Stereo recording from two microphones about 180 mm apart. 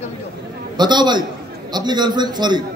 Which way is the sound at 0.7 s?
25° right (ahead or behind).